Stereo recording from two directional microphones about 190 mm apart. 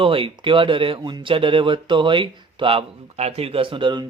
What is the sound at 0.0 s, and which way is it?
Speech, 30° right (ahead or behind).